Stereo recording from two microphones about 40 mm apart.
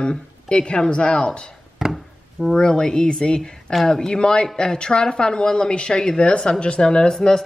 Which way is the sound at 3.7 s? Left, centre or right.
Centre.